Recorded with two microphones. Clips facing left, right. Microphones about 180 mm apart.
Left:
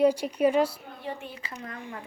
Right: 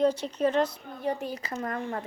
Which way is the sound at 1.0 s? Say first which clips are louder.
Right 7 dB; 40° right (ahead or behind).